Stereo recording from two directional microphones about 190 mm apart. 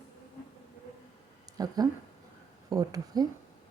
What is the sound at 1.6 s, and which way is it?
Speech, 20° right (ahead or behind).